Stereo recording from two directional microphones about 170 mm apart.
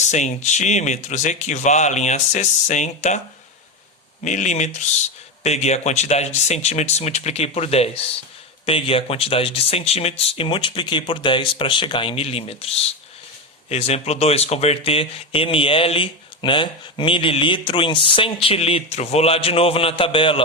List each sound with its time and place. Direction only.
0.0 s speech: 45° left (ahead or behind)
4.2 s speech: 45° left (ahead or behind)